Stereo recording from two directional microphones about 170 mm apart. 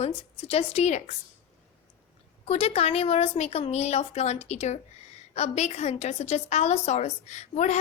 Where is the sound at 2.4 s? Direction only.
35° left (ahead or behind).